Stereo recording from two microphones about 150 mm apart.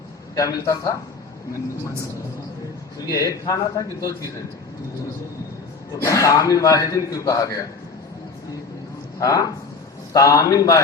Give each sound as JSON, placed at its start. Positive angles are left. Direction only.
{"t": 0.3, "sound": "a man's voice", "side_deg": 25}
{"t": 3.1, "sound": "a man's voice", "side_deg": 25}
{"t": 6.0, "sound": "a man's voice", "side_deg": 20}
{"t": 9.1, "sound": "a man's voice", "side_deg": 20}